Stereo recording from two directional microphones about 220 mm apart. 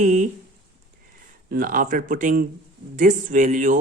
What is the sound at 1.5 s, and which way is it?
Speech, 40° right (ahead or behind).